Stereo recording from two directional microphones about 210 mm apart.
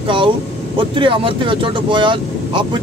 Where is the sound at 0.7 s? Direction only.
25° right (ahead or behind).